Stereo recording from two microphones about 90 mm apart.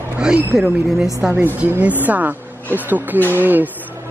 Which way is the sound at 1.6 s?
15° right (ahead or behind).